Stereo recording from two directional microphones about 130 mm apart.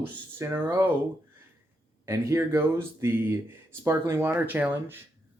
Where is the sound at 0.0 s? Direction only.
20° right (ahead or behind).